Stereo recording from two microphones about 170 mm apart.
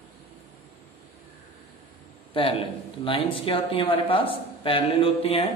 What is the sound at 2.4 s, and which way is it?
Speech, 30° left (ahead or behind).